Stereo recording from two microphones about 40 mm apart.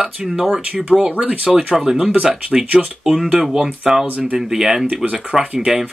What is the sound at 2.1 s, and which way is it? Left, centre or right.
Speech, right.